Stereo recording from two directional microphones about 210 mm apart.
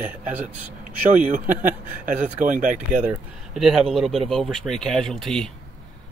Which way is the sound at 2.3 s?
40° right (ahead or behind).